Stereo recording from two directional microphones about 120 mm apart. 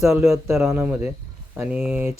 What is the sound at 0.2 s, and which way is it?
Speech, 25° right (ahead or behind).